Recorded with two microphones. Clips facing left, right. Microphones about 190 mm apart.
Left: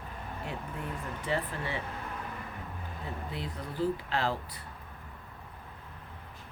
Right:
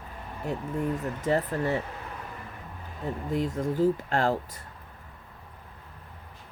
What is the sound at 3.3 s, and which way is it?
Speech, 45° right (ahead or behind).